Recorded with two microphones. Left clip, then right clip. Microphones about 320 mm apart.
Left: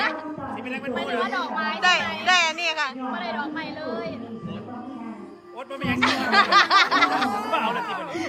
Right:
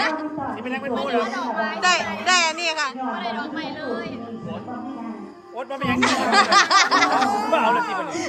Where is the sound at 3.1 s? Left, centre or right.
Left.